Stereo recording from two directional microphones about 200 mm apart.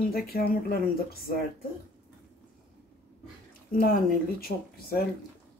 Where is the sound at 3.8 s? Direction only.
50° left (ahead or behind).